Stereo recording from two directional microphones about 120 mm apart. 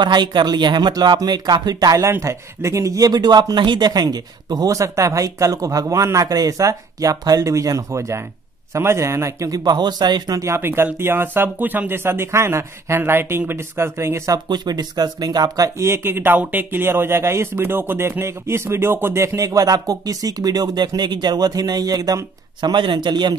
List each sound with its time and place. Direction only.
0.0 s a man's voice: 40° right (ahead or behind)